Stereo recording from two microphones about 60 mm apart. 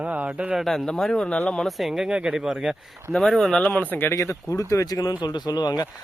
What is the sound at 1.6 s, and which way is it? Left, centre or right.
Speech, centre.